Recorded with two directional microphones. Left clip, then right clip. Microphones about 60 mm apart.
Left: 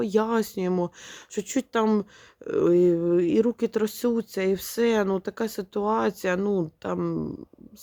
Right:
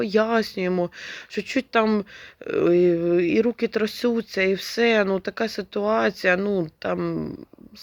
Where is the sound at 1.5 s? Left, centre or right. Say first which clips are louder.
Right 3 dB; left.